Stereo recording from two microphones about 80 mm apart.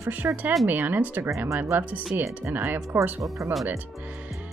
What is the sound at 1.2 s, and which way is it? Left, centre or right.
Speech, right.